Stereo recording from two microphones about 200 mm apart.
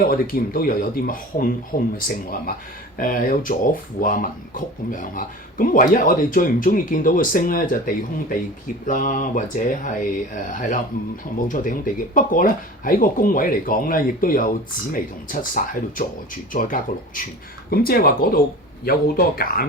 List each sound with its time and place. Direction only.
0.0 s speech: 45° left (ahead or behind)